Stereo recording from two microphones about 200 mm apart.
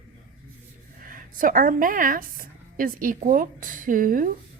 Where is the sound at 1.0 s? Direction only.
40° right (ahead or behind).